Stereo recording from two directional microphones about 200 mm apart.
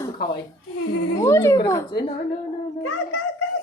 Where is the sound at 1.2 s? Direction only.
15° left (ahead or behind).